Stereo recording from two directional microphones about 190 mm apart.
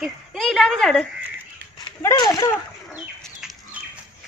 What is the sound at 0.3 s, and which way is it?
Speech, centre (ahead or behind).